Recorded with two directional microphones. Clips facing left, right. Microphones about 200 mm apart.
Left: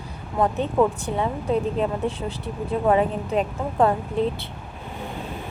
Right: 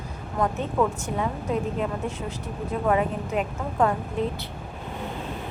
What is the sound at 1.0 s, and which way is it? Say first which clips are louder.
A woman's voice: left 3 dB; 30° left (ahead or behind).